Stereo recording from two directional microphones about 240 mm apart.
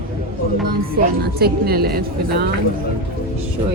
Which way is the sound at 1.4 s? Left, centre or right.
Right.